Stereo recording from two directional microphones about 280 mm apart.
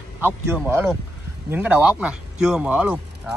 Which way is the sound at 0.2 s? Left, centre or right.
Centre.